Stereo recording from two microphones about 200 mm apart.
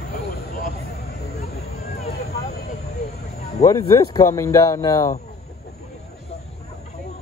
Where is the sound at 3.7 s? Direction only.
20° left (ahead or behind).